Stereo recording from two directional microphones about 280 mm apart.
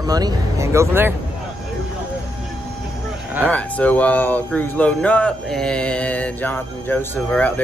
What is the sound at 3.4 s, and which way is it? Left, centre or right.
Speech, centre.